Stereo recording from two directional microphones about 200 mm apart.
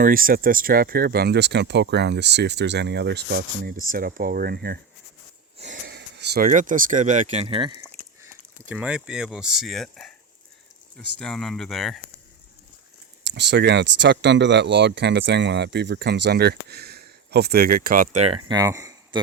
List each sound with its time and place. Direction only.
0.0 s speech: 45° right (ahead or behind); by 7.8 s 25° right (ahead or behind)
8.7 s speech: 5° right (ahead or behind)
11.2 s speech: centre (ahead or behind)
13.2 s speech: 60° right (ahead or behind); by 18.3 s 35° right (ahead or behind)
18.4 s speech: 15° right (ahead or behind)